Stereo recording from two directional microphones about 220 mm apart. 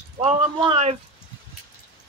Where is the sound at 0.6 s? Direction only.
25° right (ahead or behind).